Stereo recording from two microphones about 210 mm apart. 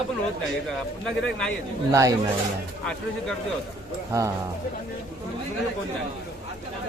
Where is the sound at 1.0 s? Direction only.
5° left (ahead or behind).